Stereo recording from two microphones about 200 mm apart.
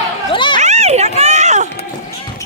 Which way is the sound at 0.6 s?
35° right (ahead or behind).